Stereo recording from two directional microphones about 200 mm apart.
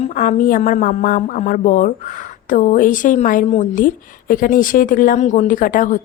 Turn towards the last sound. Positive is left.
turn(degrees=40)  # may be behind; listen again after turning